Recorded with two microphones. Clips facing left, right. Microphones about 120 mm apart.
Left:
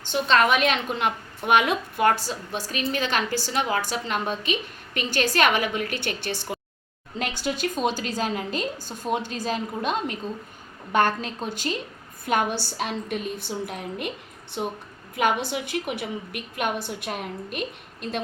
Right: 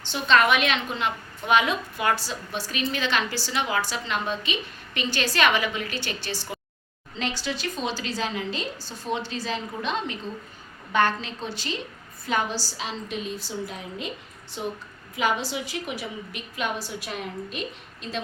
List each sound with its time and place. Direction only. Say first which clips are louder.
0.0 s a woman's voice: even; 40° left (ahead or behind)